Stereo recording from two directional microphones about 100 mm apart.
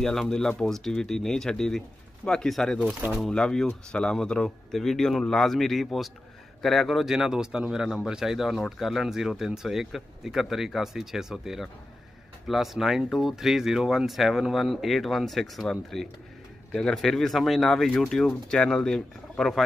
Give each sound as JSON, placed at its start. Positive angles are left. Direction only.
{"t": 0.0, "sound": "speech", "side_deg": 5}
{"t": 2.8, "sound": "speech", "side_deg": -15}
{"t": 3.1, "sound": "speech", "side_deg": 5}